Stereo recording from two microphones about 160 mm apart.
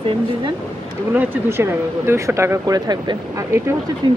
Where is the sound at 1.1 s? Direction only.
15° right (ahead or behind).